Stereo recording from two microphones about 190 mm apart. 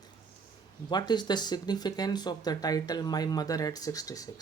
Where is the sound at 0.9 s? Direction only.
20° left (ahead or behind).